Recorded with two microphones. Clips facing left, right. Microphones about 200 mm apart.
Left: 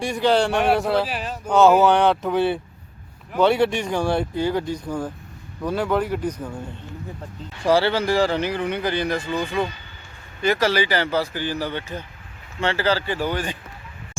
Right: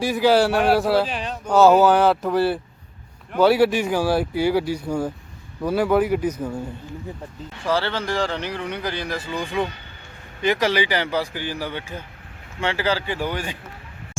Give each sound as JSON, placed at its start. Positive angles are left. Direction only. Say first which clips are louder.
{"t": 0.0, "sound": "speech", "louder": "right 2 dB", "side_deg": -5}
{"t": 7.6, "sound": "speech", "louder": "left 5 dB", "side_deg": 10}